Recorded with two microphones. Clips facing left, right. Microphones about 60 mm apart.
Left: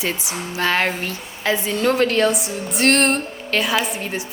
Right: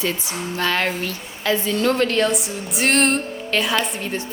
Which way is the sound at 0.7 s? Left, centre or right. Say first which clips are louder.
Left 1 dB; left.